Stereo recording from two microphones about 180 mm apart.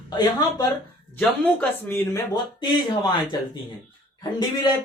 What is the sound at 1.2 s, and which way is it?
Speech, 5° left (ahead or behind).